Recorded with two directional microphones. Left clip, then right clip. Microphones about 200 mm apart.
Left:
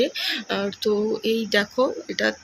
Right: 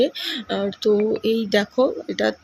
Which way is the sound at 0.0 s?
15° right (ahead or behind).